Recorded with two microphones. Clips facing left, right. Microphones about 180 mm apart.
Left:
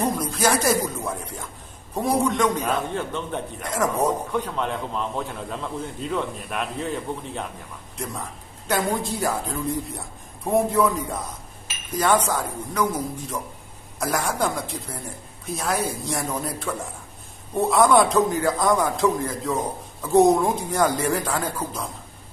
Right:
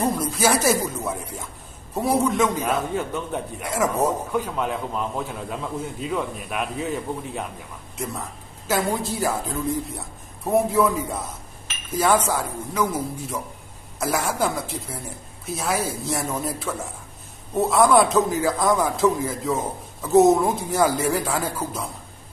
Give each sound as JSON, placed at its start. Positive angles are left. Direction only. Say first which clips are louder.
{"t": 0.0, "sound": "a man's voice", "louder": "right 1 dB", "side_deg": -5}